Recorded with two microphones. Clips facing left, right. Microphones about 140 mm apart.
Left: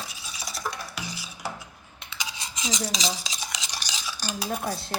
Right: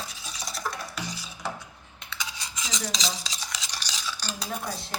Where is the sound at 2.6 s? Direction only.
10° left (ahead or behind).